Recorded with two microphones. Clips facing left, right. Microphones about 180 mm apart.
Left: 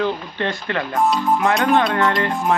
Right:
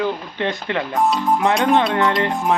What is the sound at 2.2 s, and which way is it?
Music, 20° right (ahead or behind).